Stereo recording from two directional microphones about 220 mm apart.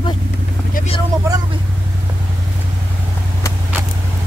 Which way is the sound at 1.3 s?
15° right (ahead or behind).